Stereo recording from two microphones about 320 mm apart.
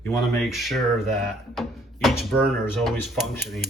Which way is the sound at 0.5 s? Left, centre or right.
Centre.